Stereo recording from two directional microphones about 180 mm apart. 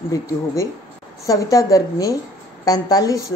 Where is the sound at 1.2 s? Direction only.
20° left (ahead or behind).